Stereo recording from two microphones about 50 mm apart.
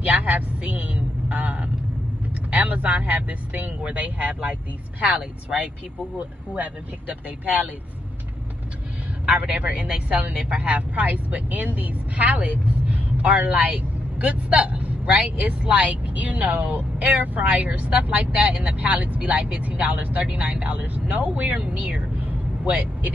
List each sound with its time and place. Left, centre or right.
0.0 s a man's voice: right
6.1 s speech: right
9.2 s speech: right